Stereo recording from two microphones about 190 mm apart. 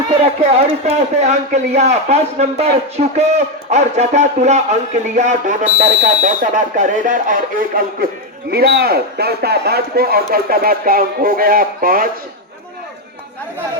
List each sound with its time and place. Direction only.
0.1 s a man's voice: 35° right (ahead or behind)
8.4 s speech: 60° right (ahead or behind)